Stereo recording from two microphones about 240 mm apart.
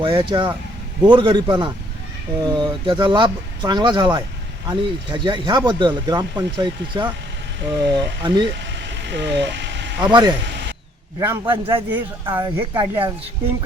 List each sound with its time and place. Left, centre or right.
0.0 s speech: right
8.8 s vehicle: right
10.0 s speech: centre
11.7 s speech: centre